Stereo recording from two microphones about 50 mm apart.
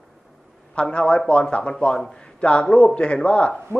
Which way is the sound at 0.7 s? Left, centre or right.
Left.